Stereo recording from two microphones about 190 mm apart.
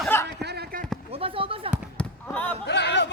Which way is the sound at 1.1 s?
30° right (ahead or behind).